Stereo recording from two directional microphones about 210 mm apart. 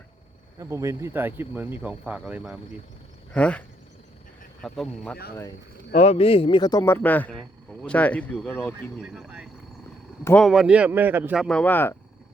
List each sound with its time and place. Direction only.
0.6 s speech: 15° right (ahead or behind); by 3.6 s 5° left (ahead or behind)
4.6 s speech: centre (ahead or behind)
5.9 s speech: 30° left (ahead or behind); by 8.7 s 5° left (ahead or behind)
9.0 s speech: 5° right (ahead or behind)
11.4 s speech: 5° left (ahead or behind)